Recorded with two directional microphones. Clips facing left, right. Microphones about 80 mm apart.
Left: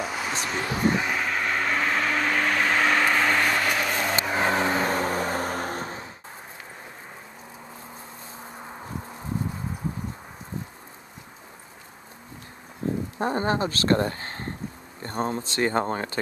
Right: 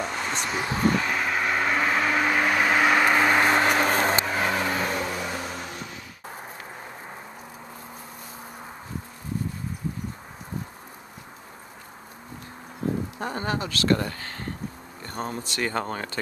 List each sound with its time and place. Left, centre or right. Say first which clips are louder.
0.0 s a sound: even; centre
1.1 s vehicle: right 1 dB; centre; by 4.1 s right
4.4 s vehicle: left 2 dB; left
13.2 s speech: left 8 dB; left